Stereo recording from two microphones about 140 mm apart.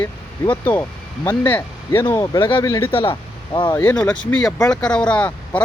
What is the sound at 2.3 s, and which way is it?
Speech, 35° left (ahead or behind).